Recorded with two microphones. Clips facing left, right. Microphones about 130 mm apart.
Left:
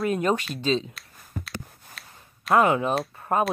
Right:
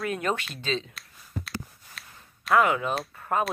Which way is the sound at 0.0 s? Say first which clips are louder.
Left 5 dB; 25° left (ahead or behind).